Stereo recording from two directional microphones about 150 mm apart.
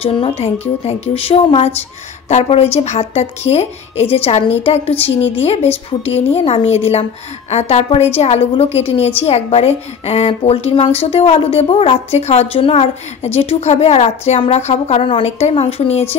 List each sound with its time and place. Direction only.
0.0 s a woman's voice: 40° left (ahead or behind)